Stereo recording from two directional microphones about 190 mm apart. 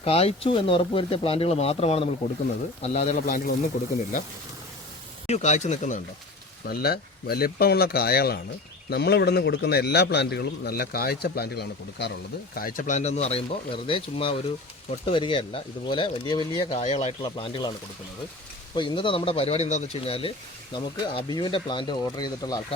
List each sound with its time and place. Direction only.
0.0 s speech: 30° left (ahead or behind); by 3.7 s 50° left (ahead or behind)
5.2 s speech: 35° left (ahead or behind)
6.7 s a man's voice: 55° left (ahead or behind)
12.5 s speech: 45° left (ahead or behind)
17.2 s speech: 25° left (ahead or behind)
18.7 s speech: 25° left (ahead or behind)